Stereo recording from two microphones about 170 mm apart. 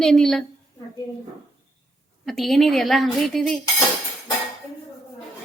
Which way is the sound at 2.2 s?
Centre (ahead or behind).